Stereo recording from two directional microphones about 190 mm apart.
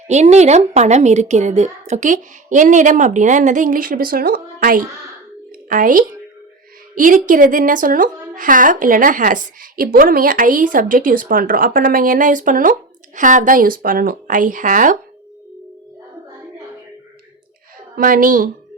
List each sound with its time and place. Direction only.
0.1 s a woman's voice: 35° right (ahead or behind)
17.9 s a woman's voice: 45° right (ahead or behind)